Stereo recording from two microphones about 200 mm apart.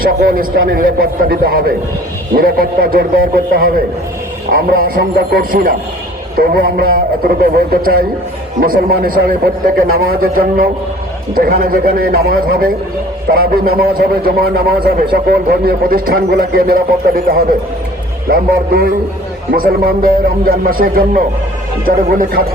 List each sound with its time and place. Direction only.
0.0 s a man's voice: 45° right (ahead or behind)